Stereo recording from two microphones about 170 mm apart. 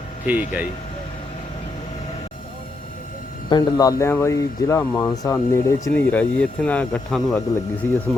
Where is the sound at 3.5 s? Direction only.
25° left (ahead or behind); by 7.4 s centre (ahead or behind).